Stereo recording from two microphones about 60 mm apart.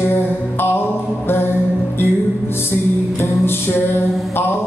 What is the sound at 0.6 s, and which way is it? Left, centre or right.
Music, left.